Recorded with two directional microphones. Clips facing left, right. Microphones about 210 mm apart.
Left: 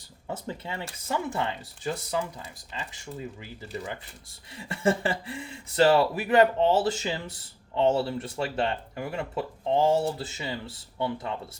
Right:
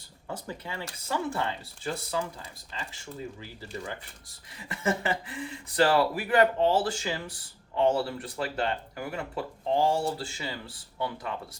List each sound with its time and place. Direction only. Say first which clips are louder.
0.4 s speech: left 2 dB; 25° left (ahead or behind)
4.5 s speech: left 4 dB; 30° left (ahead or behind)